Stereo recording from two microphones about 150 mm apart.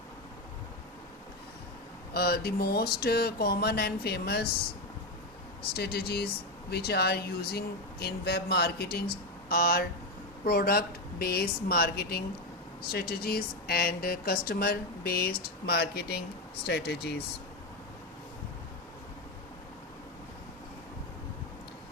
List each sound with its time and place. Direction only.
2.1 s speech: 90° left
5.7 s speech: 90° left